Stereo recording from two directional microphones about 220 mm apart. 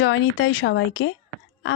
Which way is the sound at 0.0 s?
60° left (ahead or behind).